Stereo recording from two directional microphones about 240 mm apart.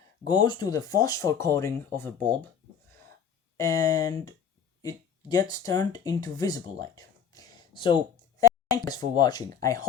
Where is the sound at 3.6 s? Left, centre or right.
Centre.